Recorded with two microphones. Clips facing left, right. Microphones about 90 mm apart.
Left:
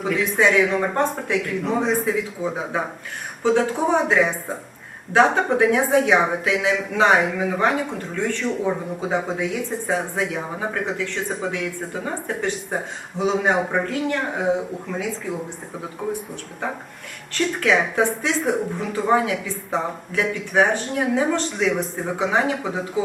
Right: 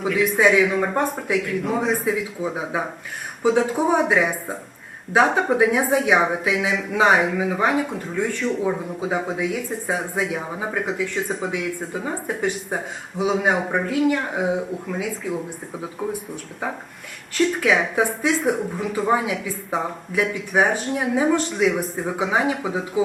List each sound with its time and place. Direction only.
0.1 s speech: 5° right (ahead or behind)
17.3 s speech: 5° right (ahead or behind)